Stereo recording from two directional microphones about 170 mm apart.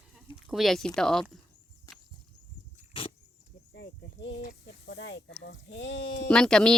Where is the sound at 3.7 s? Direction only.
90° left.